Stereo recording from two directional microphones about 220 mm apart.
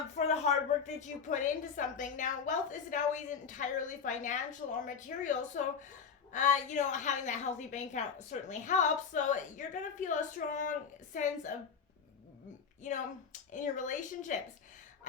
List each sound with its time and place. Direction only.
0.2 s a woman's voice: 30° left (ahead or behind)
13.5 s a woman's voice: 35° left (ahead or behind)